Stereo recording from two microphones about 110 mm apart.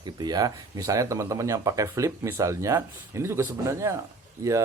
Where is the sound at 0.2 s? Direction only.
35° right (ahead or behind).